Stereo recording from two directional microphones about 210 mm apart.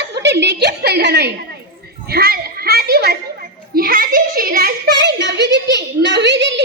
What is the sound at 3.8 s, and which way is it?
A woman's voice, 45° right (ahead or behind).